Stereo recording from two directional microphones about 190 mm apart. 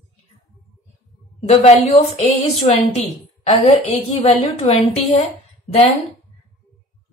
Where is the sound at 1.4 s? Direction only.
35° left (ahead or behind).